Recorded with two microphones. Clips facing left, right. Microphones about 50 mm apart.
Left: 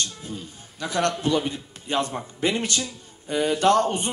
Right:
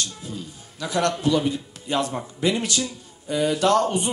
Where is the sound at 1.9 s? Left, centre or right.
Left.